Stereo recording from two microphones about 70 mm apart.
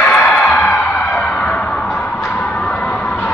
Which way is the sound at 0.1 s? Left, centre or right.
Centre.